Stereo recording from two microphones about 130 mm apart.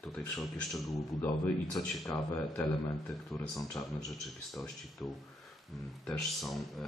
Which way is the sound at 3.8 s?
30° left (ahead or behind).